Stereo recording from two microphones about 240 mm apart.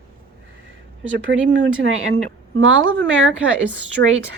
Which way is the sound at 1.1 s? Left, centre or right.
Right.